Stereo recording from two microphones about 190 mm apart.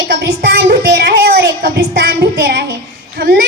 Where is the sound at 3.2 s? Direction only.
50° right (ahead or behind).